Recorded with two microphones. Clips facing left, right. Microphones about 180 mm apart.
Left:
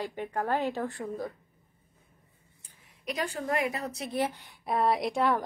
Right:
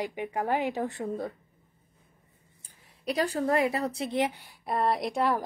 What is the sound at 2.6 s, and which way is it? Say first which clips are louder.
Speech: right 5 dB; 35° right (ahead or behind).